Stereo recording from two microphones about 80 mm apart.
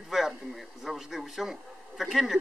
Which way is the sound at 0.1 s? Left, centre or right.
Centre.